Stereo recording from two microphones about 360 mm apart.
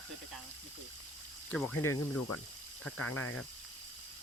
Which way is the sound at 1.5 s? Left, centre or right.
Centre.